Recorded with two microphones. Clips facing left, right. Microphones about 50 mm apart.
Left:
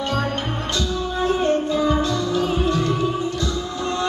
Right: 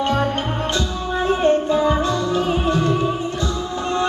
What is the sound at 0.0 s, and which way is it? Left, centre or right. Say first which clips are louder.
Music: right 4 dB; right.